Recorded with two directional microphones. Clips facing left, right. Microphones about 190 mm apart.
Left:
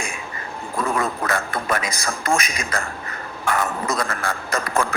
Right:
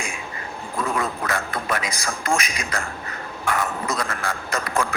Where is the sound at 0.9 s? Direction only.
45° left (ahead or behind).